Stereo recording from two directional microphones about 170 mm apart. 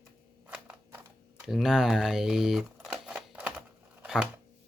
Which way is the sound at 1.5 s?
5° right (ahead or behind).